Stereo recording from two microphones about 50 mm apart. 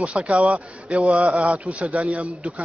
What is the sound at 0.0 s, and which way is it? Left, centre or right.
Speech, right.